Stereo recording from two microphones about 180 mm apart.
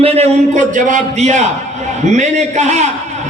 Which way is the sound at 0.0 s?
35° right (ahead or behind).